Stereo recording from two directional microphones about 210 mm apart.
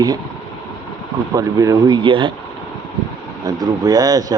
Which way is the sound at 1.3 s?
15° right (ahead or behind).